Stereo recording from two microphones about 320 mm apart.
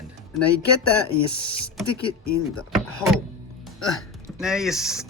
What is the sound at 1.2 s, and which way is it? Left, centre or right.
Speech, centre.